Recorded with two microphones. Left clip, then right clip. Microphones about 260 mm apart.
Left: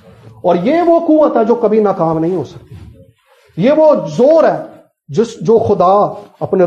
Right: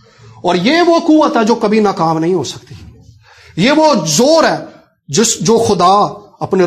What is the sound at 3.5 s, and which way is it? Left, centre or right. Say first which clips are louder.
A man's voice: left 1 dB; right.